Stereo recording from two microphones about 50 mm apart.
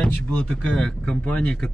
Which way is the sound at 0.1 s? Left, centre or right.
Left.